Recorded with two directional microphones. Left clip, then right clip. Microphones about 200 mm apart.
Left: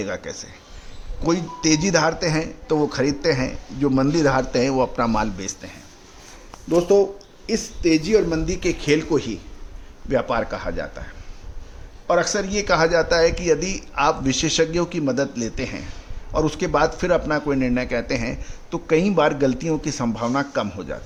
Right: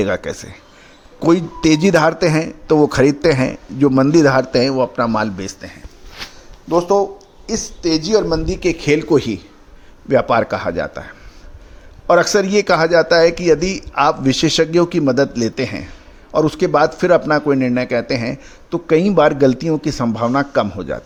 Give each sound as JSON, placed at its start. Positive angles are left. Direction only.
{"t": 0.0, "sound": "a man's voice", "side_deg": -35}
{"t": 6.7, "sound": "speech", "side_deg": -10}
{"t": 8.4, "sound": "a man's voice", "side_deg": -25}